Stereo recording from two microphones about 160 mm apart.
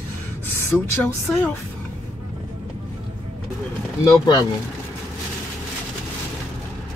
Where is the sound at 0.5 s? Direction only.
15° left (ahead or behind).